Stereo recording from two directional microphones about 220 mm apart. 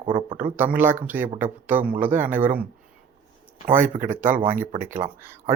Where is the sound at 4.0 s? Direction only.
10° right (ahead or behind).